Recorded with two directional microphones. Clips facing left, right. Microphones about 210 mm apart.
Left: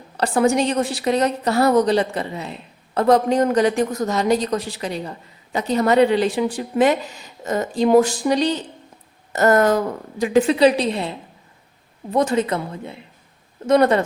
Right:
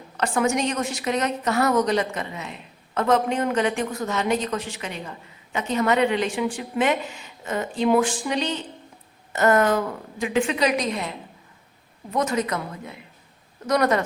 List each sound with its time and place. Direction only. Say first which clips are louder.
0.2 s a woman's voice: left 5 dB; 35° left (ahead or behind)
12.1 s a woman's voice: left 5 dB; 30° left (ahead or behind)